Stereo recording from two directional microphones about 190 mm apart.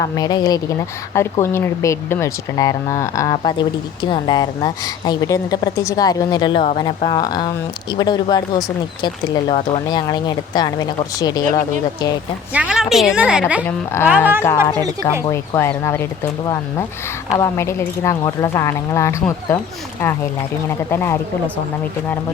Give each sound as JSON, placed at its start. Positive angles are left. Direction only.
{"t": 0.0, "sound": "speech", "side_deg": 20}
{"t": 12.5, "sound": "a woman's voice", "side_deg": -5}
{"t": 13.7, "sound": "speech", "side_deg": 10}
{"t": 20.7, "sound": "speech", "side_deg": 10}